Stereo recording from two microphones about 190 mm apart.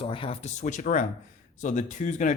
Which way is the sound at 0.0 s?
30° left (ahead or behind).